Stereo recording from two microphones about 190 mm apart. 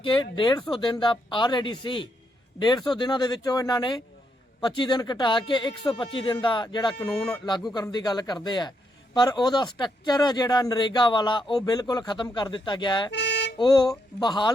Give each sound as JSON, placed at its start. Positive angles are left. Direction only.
{"t": 0.0, "sound": "speech", "side_deg": 25}
{"t": 13.1, "sound": "a sound", "side_deg": 65}
{"t": 13.6, "sound": "speech", "side_deg": 20}